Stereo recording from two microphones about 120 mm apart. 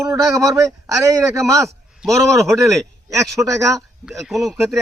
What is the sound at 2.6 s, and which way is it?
A man's voice, 25° right (ahead or behind).